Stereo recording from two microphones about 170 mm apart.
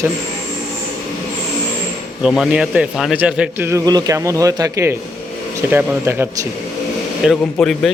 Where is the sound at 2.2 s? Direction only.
5° right (ahead or behind).